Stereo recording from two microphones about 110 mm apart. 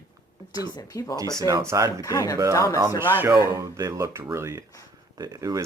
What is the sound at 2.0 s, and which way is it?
Speech, 30° left (ahead or behind).